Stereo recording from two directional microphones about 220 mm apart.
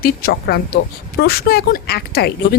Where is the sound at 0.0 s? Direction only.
45° left (ahead or behind).